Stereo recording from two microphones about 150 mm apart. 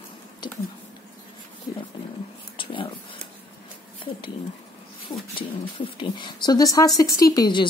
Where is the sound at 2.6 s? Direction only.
35° left (ahead or behind).